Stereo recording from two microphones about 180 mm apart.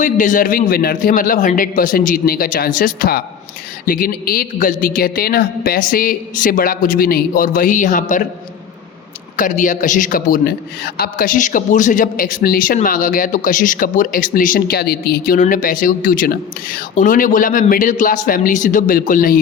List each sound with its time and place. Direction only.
0.0 s a man's voice: 45° left (ahead or behind)
9.3 s a man's voice: 45° left (ahead or behind)